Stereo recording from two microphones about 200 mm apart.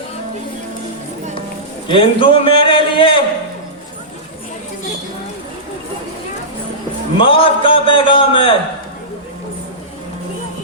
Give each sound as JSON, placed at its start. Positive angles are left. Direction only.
{"t": 1.9, "sound": "a man's voice", "side_deg": 25}
{"t": 7.2, "sound": "a man's voice", "side_deg": 25}